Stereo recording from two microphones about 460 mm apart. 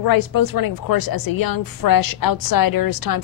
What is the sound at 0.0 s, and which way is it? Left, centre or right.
Speech, left.